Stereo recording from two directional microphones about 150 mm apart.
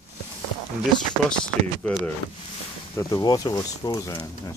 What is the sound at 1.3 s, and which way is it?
Speech, 5° left (ahead or behind).